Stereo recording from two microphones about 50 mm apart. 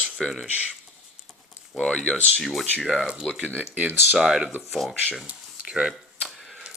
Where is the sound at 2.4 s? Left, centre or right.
Centre.